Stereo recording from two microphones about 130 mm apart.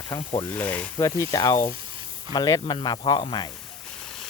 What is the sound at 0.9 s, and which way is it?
Speech, 25° left (ahead or behind).